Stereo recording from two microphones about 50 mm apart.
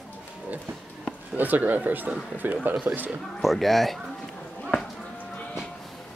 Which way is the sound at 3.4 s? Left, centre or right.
Centre.